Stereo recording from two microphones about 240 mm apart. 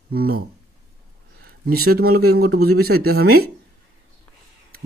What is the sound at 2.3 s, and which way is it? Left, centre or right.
Speech, right.